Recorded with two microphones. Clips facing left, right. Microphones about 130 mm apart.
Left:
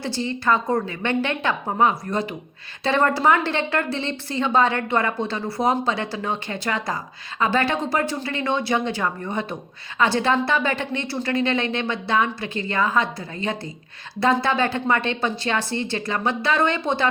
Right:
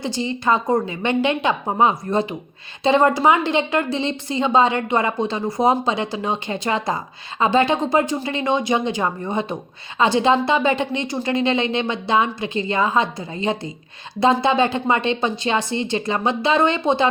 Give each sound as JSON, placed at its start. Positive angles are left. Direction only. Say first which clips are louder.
{"t": 0.0, "sound": "a woman's voice", "louder": "right 2 dB", "side_deg": -15}